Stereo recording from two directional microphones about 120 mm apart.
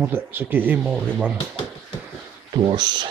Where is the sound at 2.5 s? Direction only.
35° right (ahead or behind).